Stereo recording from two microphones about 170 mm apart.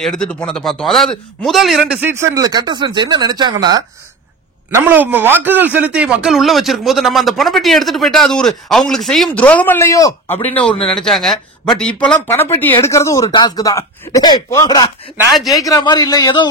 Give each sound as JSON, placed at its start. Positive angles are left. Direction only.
{"t": 0.0, "sound": "speech", "side_deg": 5}
{"t": 4.6, "sound": "a man's voice", "side_deg": -15}
{"t": 10.9, "sound": "a man's voice", "side_deg": 5}